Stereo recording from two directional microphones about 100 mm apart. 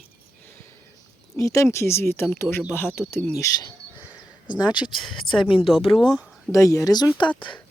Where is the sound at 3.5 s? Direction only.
35° left (ahead or behind).